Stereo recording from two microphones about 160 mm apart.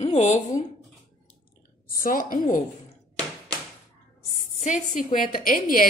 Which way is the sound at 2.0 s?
60° left (ahead or behind).